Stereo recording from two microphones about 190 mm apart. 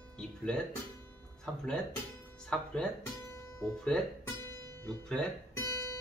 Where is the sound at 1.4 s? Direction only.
5° left (ahead or behind).